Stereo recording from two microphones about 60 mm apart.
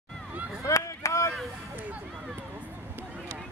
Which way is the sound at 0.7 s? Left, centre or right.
Left.